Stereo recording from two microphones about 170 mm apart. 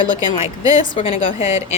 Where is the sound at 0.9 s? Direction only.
35° left (ahead or behind).